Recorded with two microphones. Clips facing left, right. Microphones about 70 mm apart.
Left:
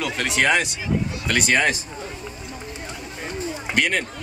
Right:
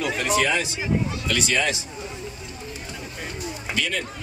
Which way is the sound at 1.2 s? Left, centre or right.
Left.